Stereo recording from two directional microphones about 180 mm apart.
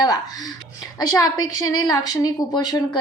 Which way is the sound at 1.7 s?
20° left (ahead or behind).